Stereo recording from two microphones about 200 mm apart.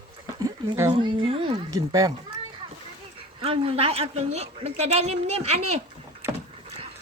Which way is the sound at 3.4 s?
30° right (ahead or behind).